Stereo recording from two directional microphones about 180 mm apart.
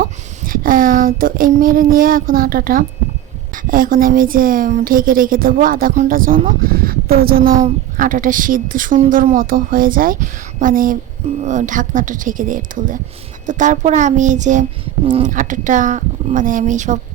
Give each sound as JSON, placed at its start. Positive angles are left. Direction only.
{"t": 0.0, "sound": "a woman's voice", "side_deg": -50}